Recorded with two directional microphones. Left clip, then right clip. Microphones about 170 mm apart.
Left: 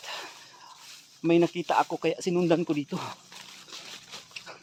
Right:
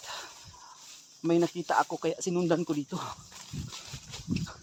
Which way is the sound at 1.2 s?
5° left (ahead or behind).